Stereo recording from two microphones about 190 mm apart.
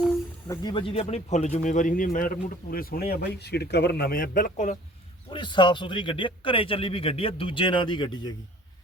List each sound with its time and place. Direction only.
0.4 s speech: 20° left (ahead or behind); by 4.8 s 40° left (ahead or behind)
5.3 s a man's voice: 25° left (ahead or behind)